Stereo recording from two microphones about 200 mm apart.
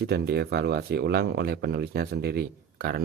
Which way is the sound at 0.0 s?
50° right (ahead or behind).